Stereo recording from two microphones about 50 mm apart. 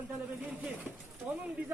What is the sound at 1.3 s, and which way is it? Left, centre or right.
Speech, right.